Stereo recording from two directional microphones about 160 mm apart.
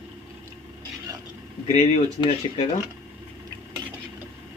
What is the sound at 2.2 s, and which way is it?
Speech, 25° left (ahead or behind).